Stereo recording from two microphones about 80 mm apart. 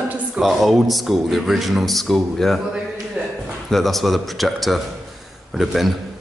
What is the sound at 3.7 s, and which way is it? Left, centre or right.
A man's voice, centre.